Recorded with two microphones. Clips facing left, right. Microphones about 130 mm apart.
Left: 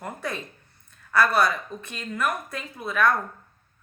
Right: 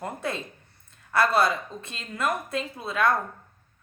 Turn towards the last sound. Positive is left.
turn(degrees=-25)  # may be behind; listen again after turning